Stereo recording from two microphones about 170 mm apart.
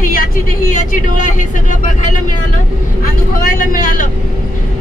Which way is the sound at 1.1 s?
50° left (ahead or behind).